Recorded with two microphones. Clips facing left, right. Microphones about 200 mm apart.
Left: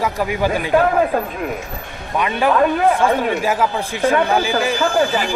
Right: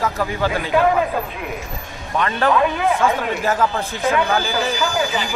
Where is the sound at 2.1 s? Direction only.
10° left (ahead or behind).